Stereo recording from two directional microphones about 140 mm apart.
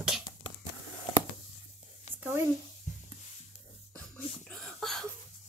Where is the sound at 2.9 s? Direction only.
60° left (ahead or behind).